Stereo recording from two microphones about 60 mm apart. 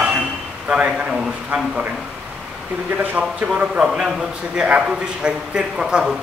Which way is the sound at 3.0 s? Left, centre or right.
Right.